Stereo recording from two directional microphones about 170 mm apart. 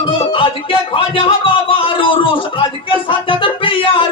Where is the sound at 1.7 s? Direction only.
30° left (ahead or behind).